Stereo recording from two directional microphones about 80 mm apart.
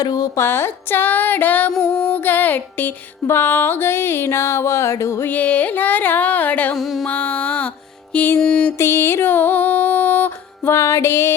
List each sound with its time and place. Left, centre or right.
0.0 s speech: left
0.3 s music: left
1.7 s music: centre
2.1 s music: left
5.3 s music: centre
6.7 s a sound: centre
7.1 s music: left
8.4 s music: centre
8.8 s music: left